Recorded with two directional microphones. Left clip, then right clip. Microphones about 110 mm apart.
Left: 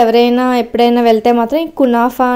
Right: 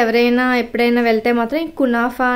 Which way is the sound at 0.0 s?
45° left (ahead or behind).